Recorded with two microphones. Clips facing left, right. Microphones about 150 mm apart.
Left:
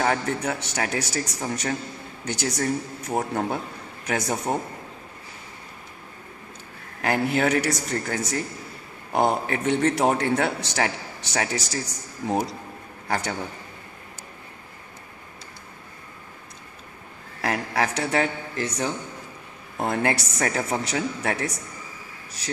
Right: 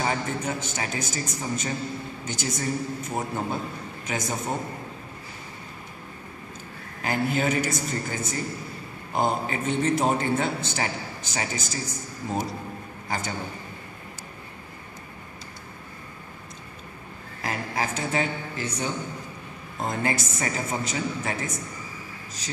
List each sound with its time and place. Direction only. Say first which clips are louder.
0.0 s a man's voice: left 3 dB; 65° left (ahead or behind)
7.0 s a man's voice: left 3 dB; 70° left (ahead or behind)
13.1 s a man's voice: left 4 dB; 65° left (ahead or behind)
17.4 s a man's voice: left 4 dB; 75° left (ahead or behind)